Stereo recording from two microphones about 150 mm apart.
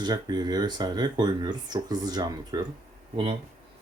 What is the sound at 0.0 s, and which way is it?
Speech, 25° right (ahead or behind).